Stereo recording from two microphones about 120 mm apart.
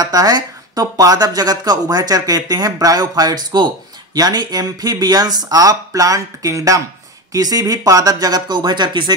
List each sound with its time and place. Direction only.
0.0 s speech: 30° right (ahead or behind)